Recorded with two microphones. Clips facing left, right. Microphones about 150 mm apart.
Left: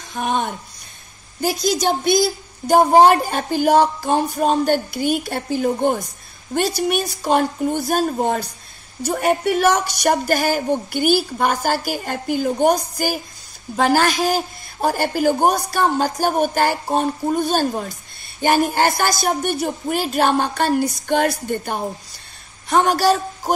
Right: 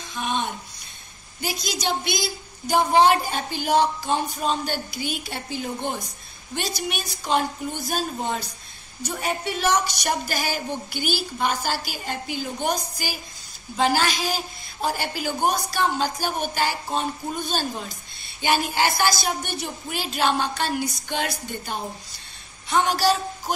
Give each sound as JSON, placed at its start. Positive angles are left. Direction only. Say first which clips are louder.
{"t": 0.1, "sound": "a woman's voice", "louder": "left 5 dB", "side_deg": 50}